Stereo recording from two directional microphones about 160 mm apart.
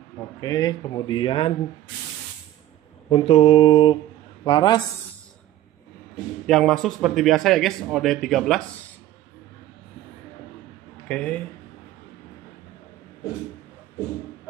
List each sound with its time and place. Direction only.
0.4 s speech: 25° left (ahead or behind)
3.1 s mantra: 40° left (ahead or behind)
4.5 s speech: 30° left (ahead or behind)
6.4 s a man's voice: 5° left (ahead or behind)
11.1 s speech: 5° left (ahead or behind)